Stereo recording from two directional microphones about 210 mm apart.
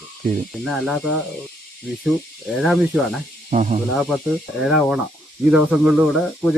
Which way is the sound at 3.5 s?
35° right (ahead or behind).